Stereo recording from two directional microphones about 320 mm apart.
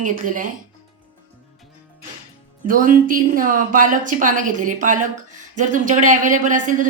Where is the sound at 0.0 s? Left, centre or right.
Right.